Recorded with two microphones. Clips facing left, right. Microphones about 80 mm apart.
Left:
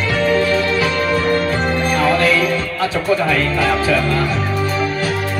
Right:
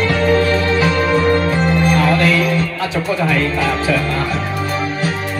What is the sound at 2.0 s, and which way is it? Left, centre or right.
Music, left.